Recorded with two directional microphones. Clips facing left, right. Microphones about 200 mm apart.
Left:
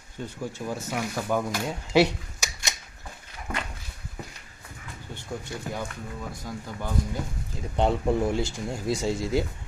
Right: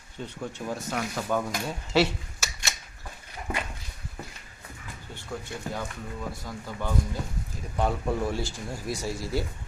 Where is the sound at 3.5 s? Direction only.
5° right (ahead or behind).